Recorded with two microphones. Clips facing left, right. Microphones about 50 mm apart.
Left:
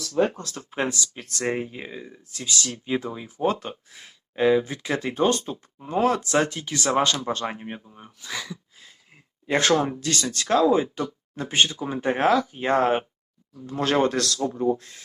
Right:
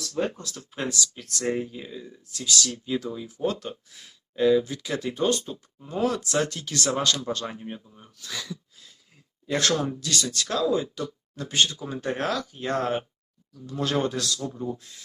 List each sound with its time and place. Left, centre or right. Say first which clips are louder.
0.3 s speech: left 3 dB; left
6.9 s speech: left 5 dB; left
8.2 s speech: left 3 dB; centre
9.5 s speech: left 4 dB; left